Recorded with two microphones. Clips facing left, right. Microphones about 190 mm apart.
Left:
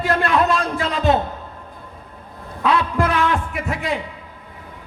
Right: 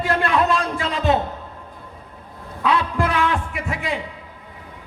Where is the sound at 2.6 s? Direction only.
45° left (ahead or behind).